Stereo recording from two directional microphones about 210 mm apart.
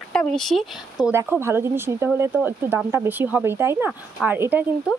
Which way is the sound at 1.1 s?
10° right (ahead or behind).